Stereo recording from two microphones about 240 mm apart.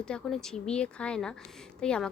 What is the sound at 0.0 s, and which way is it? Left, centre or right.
Speech, centre.